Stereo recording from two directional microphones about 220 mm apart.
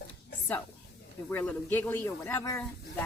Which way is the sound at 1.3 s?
10° left (ahead or behind).